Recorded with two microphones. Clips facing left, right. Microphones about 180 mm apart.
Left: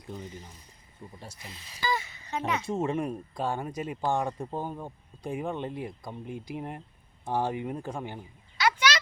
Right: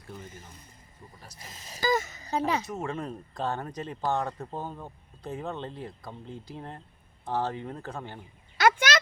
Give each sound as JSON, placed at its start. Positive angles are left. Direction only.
{"t": 0.0, "sound": "speech", "side_deg": 15}
{"t": 1.0, "sound": "speech", "side_deg": 30}
{"t": 1.4, "sound": "speech", "side_deg": -40}
{"t": 2.6, "sound": "speech", "side_deg": 25}
{"t": 8.5, "sound": "a sound", "side_deg": -50}